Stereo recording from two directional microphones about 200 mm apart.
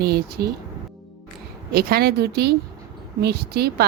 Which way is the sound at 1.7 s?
50° right (ahead or behind).